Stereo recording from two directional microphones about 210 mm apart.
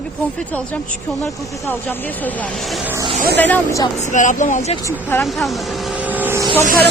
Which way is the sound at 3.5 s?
15° left (ahead or behind).